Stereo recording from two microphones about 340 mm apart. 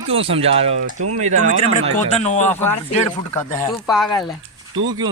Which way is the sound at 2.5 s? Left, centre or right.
Centre.